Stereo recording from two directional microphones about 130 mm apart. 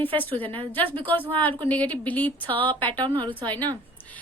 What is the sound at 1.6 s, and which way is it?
A woman's voice, 10° left (ahead or behind).